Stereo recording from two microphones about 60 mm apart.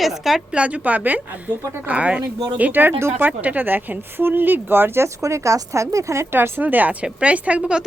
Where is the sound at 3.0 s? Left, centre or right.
Right.